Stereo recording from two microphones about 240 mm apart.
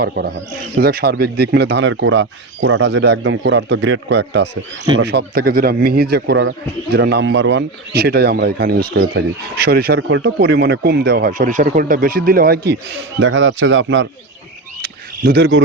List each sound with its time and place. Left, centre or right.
0.0 s a man's voice: right
13.1 s speech: right
14.8 s camera: right